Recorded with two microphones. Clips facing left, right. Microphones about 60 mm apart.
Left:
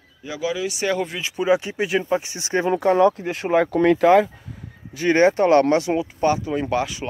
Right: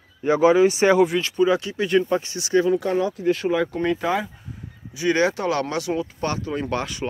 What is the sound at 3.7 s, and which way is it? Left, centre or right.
Speech, left.